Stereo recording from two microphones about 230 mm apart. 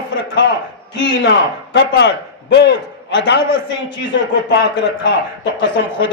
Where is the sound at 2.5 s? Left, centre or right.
Left.